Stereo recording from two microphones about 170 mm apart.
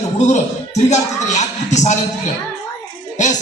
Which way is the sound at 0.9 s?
45° left (ahead or behind).